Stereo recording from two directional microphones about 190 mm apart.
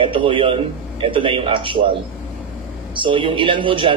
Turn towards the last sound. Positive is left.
turn(degrees=-25)  # may be behind; listen again after turning